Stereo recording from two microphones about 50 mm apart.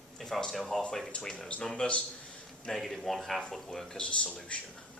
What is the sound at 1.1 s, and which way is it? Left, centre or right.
Speech, left.